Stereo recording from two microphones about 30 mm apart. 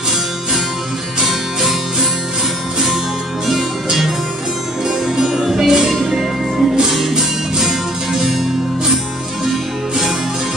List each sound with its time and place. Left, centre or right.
3.4 s music: centre
4.8 s music: centre